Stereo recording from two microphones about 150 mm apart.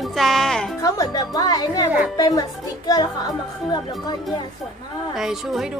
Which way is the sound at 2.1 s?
25° left (ahead or behind).